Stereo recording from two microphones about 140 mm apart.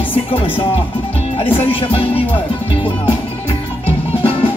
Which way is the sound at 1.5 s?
40° left (ahead or behind).